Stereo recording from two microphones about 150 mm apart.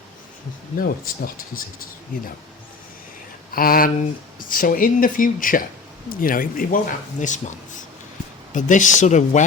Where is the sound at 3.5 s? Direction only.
75° left (ahead or behind).